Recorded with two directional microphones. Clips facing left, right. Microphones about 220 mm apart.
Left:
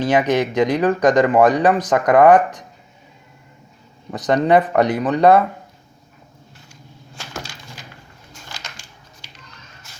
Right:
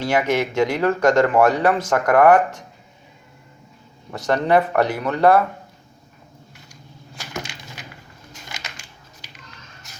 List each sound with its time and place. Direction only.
0.0 s speech: 20° left (ahead or behind)
4.1 s speech: 20° left (ahead or behind)
7.2 s wood: 20° right (ahead or behind)